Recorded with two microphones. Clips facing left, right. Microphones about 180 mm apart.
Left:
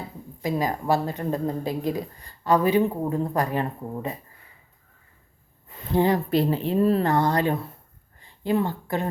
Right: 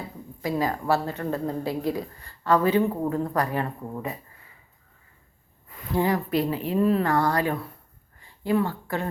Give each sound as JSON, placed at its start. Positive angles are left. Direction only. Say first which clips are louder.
{"t": 0.4, "sound": "speech", "louder": "left 1 dB", "side_deg": 20}
{"t": 5.6, "sound": "speech", "louder": "left 3 dB", "side_deg": 25}
{"t": 7.1, "sound": "speech", "louder": "left 1 dB", "side_deg": 20}